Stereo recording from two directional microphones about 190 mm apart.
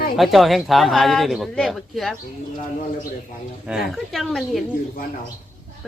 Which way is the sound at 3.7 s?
5° right (ahead or behind).